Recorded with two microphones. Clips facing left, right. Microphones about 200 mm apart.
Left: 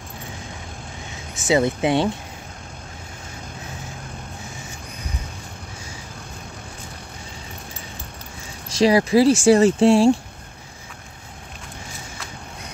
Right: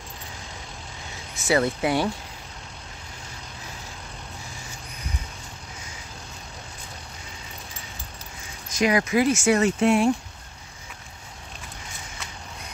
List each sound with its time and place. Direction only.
1.5 s speech: 20° left (ahead or behind)
8.6 s speech: 30° left (ahead or behind)